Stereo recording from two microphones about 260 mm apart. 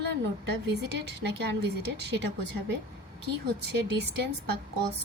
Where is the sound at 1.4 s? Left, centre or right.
Right.